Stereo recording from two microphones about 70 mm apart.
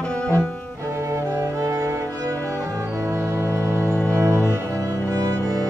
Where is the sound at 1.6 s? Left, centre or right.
Right.